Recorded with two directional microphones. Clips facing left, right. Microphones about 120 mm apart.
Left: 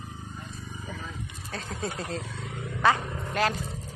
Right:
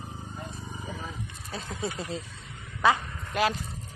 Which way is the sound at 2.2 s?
90° left.